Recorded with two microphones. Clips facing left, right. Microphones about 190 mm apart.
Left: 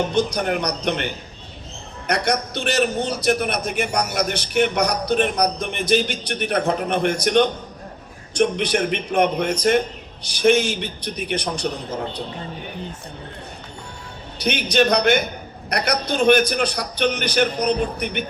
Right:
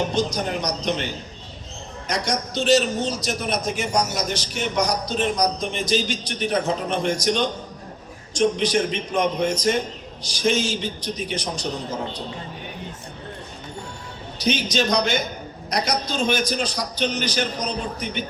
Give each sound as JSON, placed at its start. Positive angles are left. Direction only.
{"t": 0.1, "sound": "a man's voice", "side_deg": 60}
{"t": 14.3, "sound": "a man's voice", "side_deg": 60}